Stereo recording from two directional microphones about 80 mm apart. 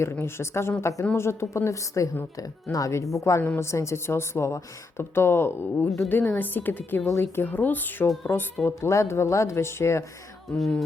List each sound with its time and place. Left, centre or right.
0.0 s a woman's voice: left
7.1 s a woman's voice: left
7.4 s a woman's voice: left
8.6 s a woman's voice: left
10.5 s speech: centre